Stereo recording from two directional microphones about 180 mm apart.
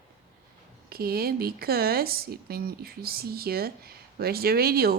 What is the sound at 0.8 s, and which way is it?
Speech, 60° right (ahead or behind).